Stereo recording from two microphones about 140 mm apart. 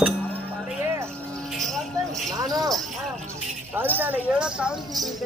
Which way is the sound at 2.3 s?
25° right (ahead or behind).